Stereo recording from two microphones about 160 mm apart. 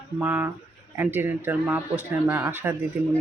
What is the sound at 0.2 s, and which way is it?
Speech, 10° right (ahead or behind).